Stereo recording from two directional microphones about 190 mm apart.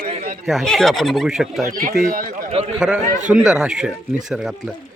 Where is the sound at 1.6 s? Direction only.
45° right (ahead or behind).